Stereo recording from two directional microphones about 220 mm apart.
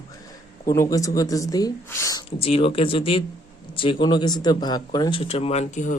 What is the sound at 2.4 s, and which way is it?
Speech, 25° left (ahead or behind).